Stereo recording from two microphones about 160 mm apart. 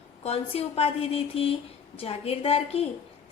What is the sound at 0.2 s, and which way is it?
A woman's voice, 40° left (ahead or behind).